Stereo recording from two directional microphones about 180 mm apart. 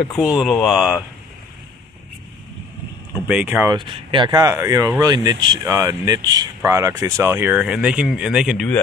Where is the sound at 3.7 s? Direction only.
25° right (ahead or behind); by 8.7 s centre (ahead or behind).